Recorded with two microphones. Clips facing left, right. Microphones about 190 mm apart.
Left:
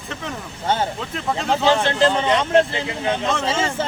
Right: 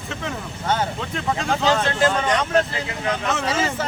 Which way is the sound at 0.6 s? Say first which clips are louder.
Left 1 dB; 25° left (ahead or behind).